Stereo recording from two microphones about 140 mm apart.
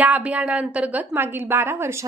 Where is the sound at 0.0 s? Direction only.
10° right (ahead or behind).